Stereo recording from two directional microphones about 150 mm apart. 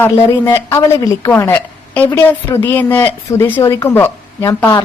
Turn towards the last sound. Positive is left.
turn(degrees=15)  # may be behind; listen again after turning